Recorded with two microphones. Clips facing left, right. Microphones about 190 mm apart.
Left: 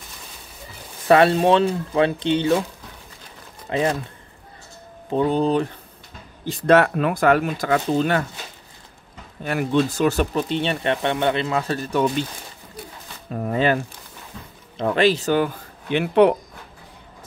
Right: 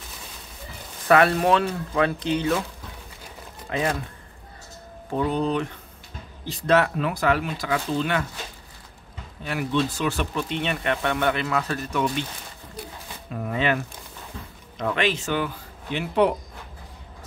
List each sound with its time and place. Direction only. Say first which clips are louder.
1.0 s speech: left 3 dB; 30° left (ahead or behind)
3.7 s speech: left 4 dB; 25° left (ahead or behind)
5.1 s speech: left 5 dB; 30° left (ahead or behind)
6.4 s speech: left 5 dB; 50° left (ahead or behind)
9.4 s speech: left 4 dB; 50° left (ahead or behind)
13.3 s speech: left 4 dB; 40° left (ahead or behind)
15.9 s speech: left 6 dB; 65° left (ahead or behind)